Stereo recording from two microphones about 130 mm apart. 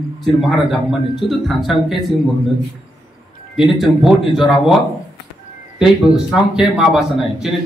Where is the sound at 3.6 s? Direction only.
Centre (ahead or behind).